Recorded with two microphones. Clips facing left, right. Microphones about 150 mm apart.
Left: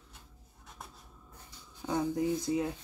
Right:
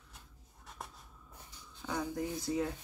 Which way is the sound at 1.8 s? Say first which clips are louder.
Left 6 dB; 20° left (ahead or behind).